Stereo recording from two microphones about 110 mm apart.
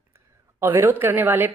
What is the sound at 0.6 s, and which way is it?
Speech, 20° right (ahead or behind).